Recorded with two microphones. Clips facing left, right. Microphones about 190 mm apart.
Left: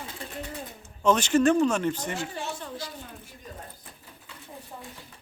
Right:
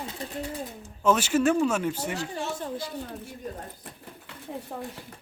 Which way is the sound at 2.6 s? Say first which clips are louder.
Right 4 dB; 55° right (ahead or behind).